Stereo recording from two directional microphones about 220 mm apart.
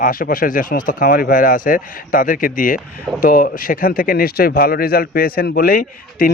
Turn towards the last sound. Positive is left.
turn(degrees=40)  # may be behind; listen again after turning